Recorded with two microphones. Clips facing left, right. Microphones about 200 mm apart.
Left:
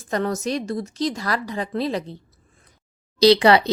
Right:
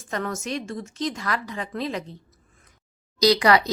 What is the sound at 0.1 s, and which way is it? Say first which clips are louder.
A woman's voice: left 5 dB; 35° left (ahead or behind).